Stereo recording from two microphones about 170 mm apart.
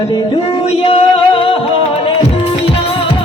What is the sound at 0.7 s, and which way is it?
Music, 35° left (ahead or behind).